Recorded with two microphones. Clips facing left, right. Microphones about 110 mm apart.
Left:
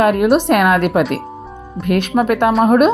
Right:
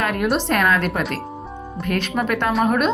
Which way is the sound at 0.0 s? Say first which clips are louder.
Left 8 dB; 55° left (ahead or behind).